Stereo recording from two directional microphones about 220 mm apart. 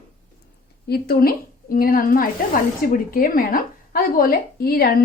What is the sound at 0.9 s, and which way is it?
A woman's voice, 45° left (ahead or behind).